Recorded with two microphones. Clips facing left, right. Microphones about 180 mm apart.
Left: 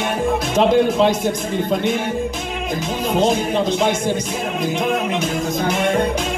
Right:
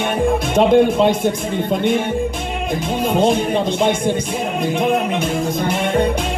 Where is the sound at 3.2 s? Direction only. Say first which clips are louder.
Even; 55° right (ahead or behind).